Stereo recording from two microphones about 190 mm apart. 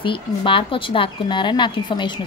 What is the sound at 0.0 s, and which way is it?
Speech, 25° left (ahead or behind).